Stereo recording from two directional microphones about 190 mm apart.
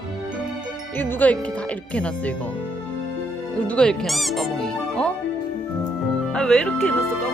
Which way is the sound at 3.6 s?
5° left (ahead or behind).